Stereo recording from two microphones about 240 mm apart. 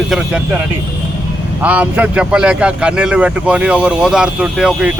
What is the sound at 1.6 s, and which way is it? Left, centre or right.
A man's voice, centre.